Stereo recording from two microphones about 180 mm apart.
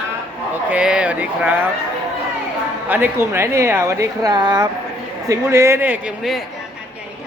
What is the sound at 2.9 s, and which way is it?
Speech, 10° right (ahead or behind).